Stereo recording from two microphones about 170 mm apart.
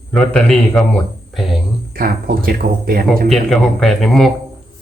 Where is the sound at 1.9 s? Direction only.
60° right (ahead or behind).